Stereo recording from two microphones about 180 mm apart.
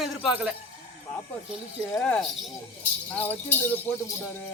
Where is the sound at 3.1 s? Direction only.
10° left (ahead or behind).